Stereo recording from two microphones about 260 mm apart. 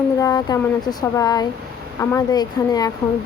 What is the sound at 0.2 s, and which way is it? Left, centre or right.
Speech, centre.